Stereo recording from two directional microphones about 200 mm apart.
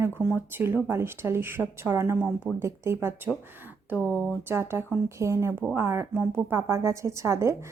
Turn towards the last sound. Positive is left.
turn(degrees=-15)  # may be behind; listen again after turning